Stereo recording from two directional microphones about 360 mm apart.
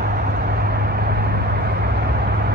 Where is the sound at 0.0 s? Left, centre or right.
Right.